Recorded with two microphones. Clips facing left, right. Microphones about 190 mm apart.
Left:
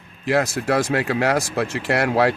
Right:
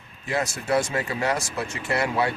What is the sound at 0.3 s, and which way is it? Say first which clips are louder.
Speech: left 5 dB; 75° left (ahead or behind).